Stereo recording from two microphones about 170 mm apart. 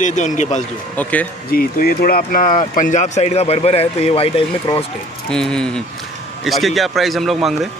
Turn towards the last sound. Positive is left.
turn(degrees=0)  # may be behind; listen again after turning